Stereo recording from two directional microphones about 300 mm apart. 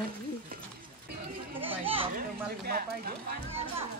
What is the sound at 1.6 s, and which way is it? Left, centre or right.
Chatter, centre.